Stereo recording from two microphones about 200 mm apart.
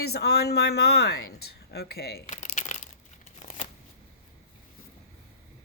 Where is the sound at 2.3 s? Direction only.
35° left (ahead or behind).